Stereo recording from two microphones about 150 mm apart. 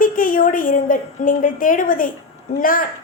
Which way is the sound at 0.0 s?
65° left (ahead or behind).